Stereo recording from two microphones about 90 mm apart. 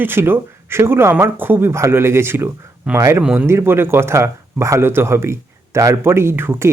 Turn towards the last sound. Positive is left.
turn(degrees=-25)  # may be behind; listen again after turning